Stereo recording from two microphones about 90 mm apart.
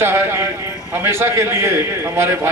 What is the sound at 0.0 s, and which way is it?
A man's voice, 30° right (ahead or behind).